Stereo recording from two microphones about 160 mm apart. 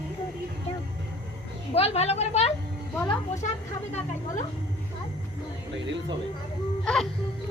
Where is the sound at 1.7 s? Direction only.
40° left (ahead or behind).